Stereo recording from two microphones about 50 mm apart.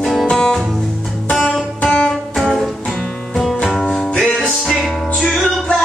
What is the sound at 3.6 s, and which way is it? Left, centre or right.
Music, centre.